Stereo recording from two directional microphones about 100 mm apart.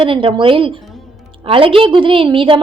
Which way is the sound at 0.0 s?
60° right (ahead or behind).